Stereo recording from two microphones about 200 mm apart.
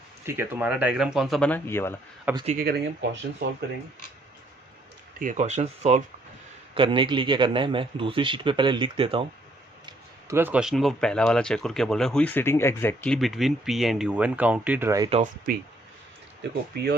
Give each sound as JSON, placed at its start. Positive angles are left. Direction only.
{"t": 0.3, "sound": "speech", "side_deg": -10}
{"t": 2.5, "sound": "speech", "side_deg": -50}
{"t": 5.2, "sound": "speech", "side_deg": -40}
{"t": 9.8, "sound": "speech", "side_deg": -15}
{"t": 13.1, "sound": "speech", "side_deg": 0}
{"t": 15.1, "sound": "speech", "side_deg": -40}